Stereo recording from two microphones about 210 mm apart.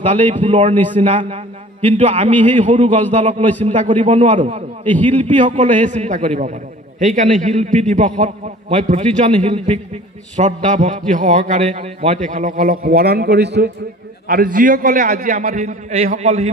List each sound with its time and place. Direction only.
0.3 s a man's voice: 30° right (ahead or behind)
4.8 s a man's voice: 10° left (ahead or behind)
5.6 s a man's voice: 35° right (ahead or behind)